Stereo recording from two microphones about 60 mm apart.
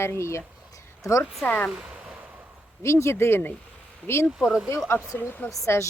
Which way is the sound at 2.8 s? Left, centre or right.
Left.